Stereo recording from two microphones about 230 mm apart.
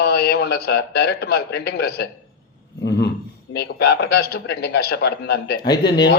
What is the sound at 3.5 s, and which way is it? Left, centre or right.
A man's voice, left.